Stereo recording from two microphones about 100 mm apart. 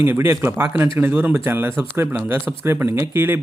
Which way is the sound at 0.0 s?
20° right (ahead or behind).